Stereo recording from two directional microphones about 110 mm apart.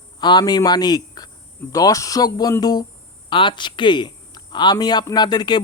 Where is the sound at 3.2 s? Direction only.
45° left (ahead or behind).